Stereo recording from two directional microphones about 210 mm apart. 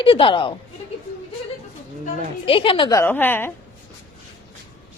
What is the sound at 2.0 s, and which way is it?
A woman's voice, 25° left (ahead or behind).